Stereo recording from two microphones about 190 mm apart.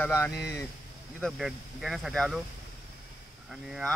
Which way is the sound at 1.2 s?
Centre (ahead or behind).